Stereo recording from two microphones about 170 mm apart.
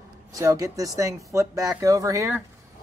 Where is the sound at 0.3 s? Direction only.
20° right (ahead or behind).